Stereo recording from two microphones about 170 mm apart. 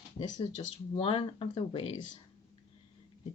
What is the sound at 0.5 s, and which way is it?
Speech, 35° left (ahead or behind).